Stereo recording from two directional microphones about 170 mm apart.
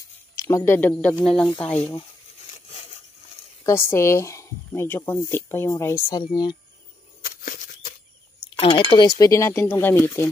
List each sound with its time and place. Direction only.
0.5 s speech: 15° left (ahead or behind)
1.8 s speech: 35° left (ahead or behind)
3.6 s speech: 15° left (ahead or behind)
7.2 s a sound: 55° left (ahead or behind)
8.5 s speech: 30° left (ahead or behind); by 10.3 s 15° left (ahead or behind)